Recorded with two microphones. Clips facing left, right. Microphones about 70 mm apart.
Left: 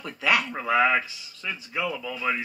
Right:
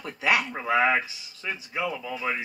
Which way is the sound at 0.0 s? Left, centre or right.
Right.